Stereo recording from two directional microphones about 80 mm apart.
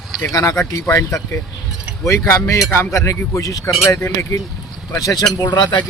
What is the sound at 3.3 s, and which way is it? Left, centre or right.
Speech, left.